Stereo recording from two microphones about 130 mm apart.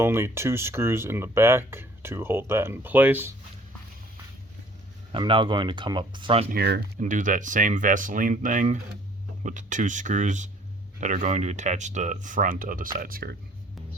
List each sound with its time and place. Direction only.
0.0 s speech: 20° right (ahead or behind)
5.1 s speech: 40° right (ahead or behind)
7.0 s speech: 80° right